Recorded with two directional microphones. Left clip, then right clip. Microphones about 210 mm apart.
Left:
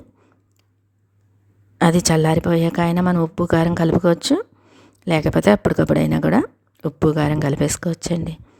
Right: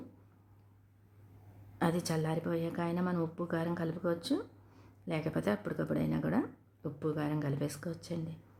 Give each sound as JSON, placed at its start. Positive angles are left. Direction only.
{"t": 1.8, "sound": "a woman's voice", "side_deg": 45}